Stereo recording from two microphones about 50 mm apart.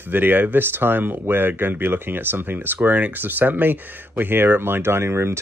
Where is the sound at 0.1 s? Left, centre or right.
Right.